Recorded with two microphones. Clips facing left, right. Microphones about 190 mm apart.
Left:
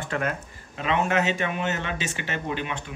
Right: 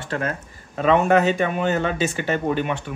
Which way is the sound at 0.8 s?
45° right (ahead or behind).